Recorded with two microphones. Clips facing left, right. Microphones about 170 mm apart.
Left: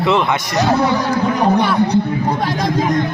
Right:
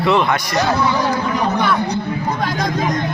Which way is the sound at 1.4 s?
35° left (ahead or behind).